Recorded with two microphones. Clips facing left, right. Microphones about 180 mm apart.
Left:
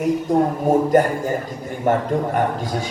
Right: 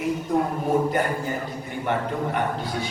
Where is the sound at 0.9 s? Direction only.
45° left (ahead or behind).